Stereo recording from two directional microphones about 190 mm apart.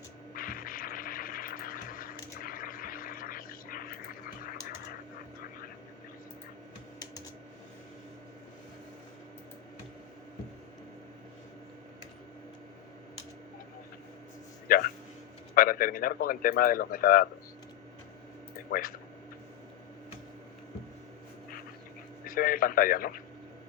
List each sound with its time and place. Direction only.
0.3 s a sound: 50° left (ahead or behind)
14.7 s speech: 50° left (ahead or behind)
18.7 s speech: 50° left (ahead or behind)
22.2 s radio: 50° left (ahead or behind)